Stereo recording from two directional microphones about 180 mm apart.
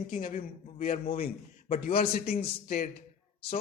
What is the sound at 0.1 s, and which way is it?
A man's voice, 45° left (ahead or behind).